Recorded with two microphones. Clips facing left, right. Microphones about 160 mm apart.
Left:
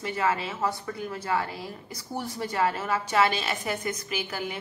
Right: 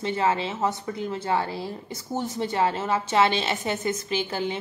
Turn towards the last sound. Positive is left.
turn(degrees=-25)  # may be behind; listen again after turning